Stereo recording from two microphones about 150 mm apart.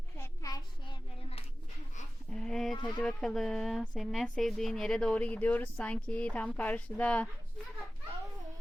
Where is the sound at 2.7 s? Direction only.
30° left (ahead or behind).